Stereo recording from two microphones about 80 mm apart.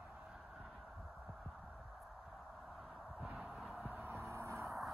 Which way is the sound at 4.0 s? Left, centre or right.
Right.